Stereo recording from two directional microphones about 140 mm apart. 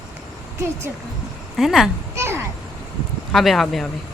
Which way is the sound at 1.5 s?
Centre (ahead or behind).